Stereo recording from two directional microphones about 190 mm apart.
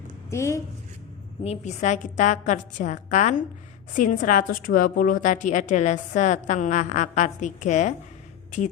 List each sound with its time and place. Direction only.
0.3 s a woman's voice: 15° left (ahead or behind)
1.5 s a woman's voice: 40° left (ahead or behind)